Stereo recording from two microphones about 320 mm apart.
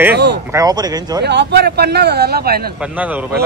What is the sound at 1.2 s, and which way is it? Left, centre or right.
Speech, right.